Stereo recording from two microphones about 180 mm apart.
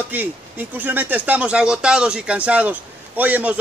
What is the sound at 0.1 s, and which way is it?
A man's voice, 10° right (ahead or behind).